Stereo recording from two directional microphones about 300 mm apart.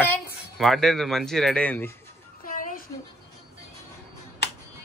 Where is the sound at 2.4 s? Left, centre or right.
Left.